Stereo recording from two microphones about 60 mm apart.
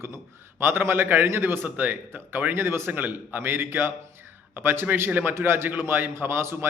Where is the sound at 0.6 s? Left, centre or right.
Right.